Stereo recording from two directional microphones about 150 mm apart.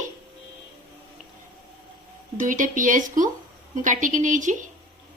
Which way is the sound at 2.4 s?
60° right (ahead or behind).